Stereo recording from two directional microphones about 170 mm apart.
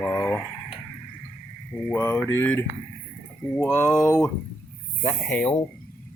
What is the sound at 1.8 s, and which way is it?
Mantra, 10° left (ahead or behind).